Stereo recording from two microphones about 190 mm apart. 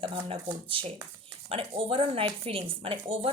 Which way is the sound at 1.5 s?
30° right (ahead or behind).